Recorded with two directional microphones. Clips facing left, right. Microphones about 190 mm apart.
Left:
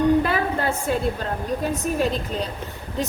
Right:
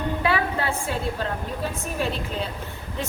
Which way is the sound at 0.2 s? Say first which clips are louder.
Left 2 dB; 45° left (ahead or behind).